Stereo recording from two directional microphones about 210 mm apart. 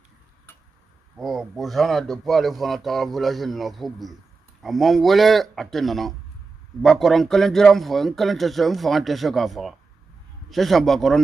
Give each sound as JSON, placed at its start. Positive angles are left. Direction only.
{"t": 1.1, "sound": "speech", "side_deg": 0}